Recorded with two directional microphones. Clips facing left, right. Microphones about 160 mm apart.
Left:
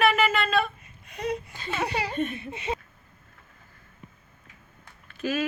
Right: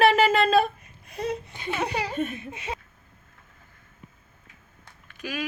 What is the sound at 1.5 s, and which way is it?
A woman's voice, 15° right (ahead or behind).